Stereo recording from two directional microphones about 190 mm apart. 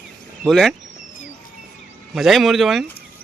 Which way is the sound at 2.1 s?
Centre (ahead or behind).